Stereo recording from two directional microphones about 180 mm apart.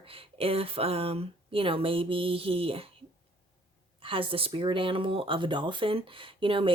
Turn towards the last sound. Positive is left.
turn(degrees=-30)  # may be behind; listen again after turning